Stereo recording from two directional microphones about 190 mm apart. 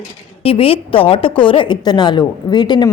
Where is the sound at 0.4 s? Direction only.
30° left (ahead or behind).